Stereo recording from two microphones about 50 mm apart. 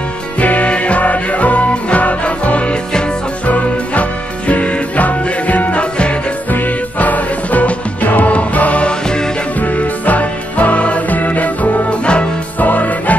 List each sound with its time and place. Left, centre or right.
0.4 s music: left
6.5 s music: left
9.0 s music: centre
9.6 s music: left